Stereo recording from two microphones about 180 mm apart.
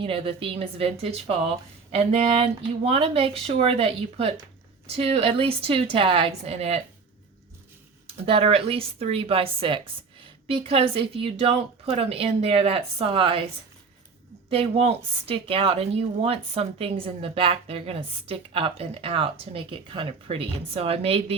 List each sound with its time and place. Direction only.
0.0 s speech: 30° right (ahead or behind)
8.0 s speech: 30° right (ahead or behind)
14.5 s speech: 35° right (ahead or behind)